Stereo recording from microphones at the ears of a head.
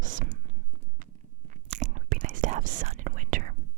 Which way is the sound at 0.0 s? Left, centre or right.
Right.